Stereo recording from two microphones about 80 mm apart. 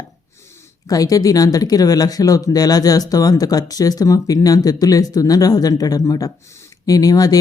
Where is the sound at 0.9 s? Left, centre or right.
Left.